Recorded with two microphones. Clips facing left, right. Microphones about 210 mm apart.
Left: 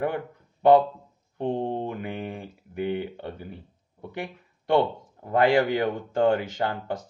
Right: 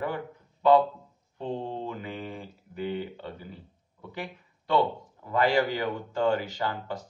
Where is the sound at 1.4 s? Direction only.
55° left (ahead or behind).